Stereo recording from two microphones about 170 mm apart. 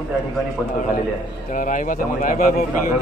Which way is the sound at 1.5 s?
50° left (ahead or behind).